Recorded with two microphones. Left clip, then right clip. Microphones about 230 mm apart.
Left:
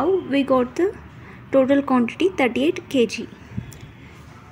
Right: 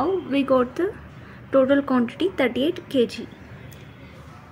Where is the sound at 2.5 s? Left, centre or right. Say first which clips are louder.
Left 2 dB; right.